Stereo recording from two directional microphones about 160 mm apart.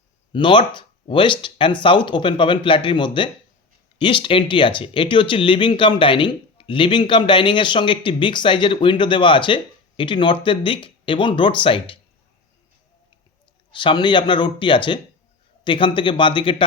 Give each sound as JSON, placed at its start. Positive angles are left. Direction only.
{"t": 0.3, "sound": "speech", "side_deg": 30}
{"t": 13.7, "sound": "speech", "side_deg": 30}